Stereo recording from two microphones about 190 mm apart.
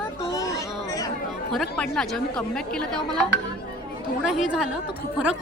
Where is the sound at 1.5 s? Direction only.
Centre (ahead or behind).